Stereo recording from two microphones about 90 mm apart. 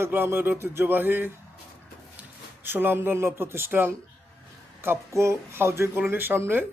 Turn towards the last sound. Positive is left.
turn(degrees=-25)  # may be behind; listen again after turning